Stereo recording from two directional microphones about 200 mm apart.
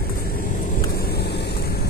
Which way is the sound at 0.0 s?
50° left (ahead or behind).